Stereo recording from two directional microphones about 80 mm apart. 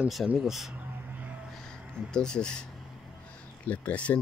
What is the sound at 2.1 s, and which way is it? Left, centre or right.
Speech, centre.